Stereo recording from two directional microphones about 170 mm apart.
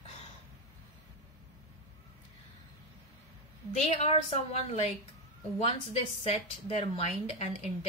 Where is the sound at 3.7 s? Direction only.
40° left (ahead or behind).